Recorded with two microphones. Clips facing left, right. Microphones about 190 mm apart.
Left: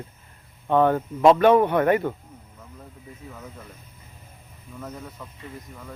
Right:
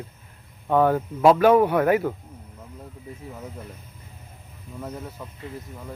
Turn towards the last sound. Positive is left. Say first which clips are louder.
# right 3 dB
turn(degrees=-10)  # may be behind; listen again after turning